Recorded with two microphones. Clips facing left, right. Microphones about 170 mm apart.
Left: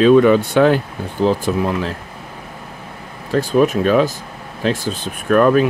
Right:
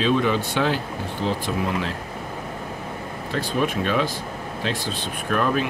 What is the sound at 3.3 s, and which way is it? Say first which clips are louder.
Speech: left 9 dB; 45° left (ahead or behind).